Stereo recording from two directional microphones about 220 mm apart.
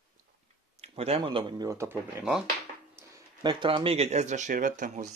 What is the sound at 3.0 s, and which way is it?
Speech, 20° right (ahead or behind).